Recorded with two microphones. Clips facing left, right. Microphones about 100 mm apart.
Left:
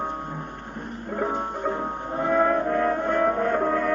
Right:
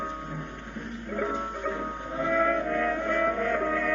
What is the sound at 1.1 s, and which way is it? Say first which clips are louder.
Music: left 3 dB; 45° left (ahead or behind).